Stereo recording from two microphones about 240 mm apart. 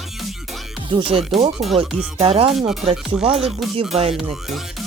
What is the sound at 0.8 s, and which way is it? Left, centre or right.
Speech, right.